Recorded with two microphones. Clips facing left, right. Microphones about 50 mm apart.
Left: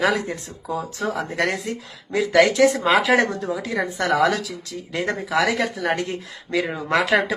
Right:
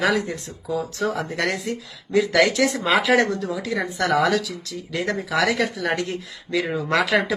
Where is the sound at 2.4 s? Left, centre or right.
Left.